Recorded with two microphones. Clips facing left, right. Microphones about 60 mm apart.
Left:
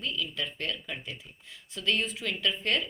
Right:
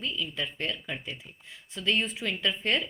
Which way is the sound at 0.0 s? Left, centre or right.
Right.